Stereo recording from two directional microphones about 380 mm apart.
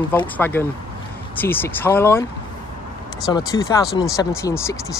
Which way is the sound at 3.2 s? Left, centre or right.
Centre.